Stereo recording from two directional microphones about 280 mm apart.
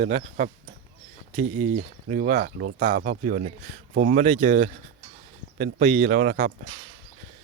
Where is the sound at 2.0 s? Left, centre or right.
Right.